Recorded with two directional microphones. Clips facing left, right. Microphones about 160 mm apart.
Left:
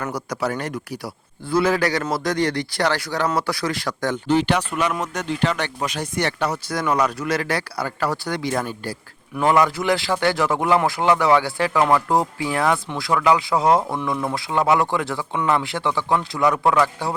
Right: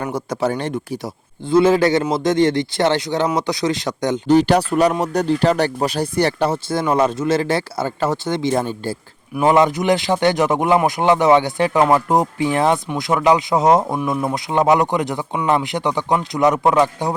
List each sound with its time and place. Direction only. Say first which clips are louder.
0.0 s speech: right 4 dB; 25° right (ahead or behind)
4.3 s speech: right 6 dB; 40° right (ahead or behind); by 17.2 s 20° right (ahead or behind)